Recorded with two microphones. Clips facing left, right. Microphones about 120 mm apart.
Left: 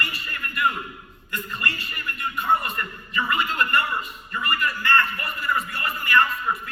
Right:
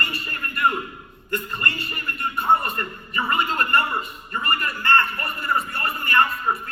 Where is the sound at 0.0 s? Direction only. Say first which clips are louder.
Right 2 dB; 35° right (ahead or behind).